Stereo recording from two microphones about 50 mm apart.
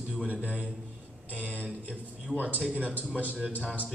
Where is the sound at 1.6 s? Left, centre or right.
Right.